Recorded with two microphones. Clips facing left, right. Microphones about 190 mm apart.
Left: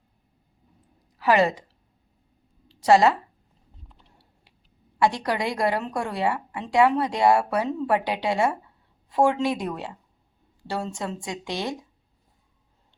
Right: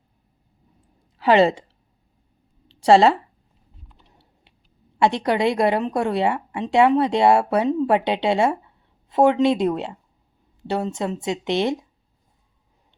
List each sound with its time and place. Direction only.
1.2 s a woman's voice: 25° right (ahead or behind)
2.6 s a sound: 30° right (ahead or behind)
4.1 s typing: 25° right (ahead or behind)
4.9 s a woman's voice: 25° right (ahead or behind)